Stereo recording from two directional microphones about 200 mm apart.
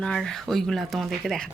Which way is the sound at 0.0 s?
Centre (ahead or behind).